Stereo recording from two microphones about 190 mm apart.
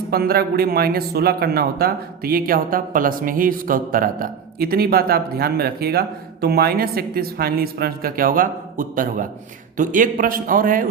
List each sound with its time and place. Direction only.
0.1 s speech: 55° right (ahead or behind)